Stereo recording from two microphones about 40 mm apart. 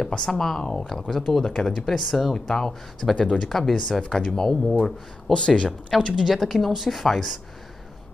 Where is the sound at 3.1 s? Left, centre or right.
Left.